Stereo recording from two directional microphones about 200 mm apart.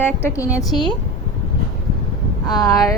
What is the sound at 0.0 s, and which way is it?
Speech, 15° left (ahead or behind).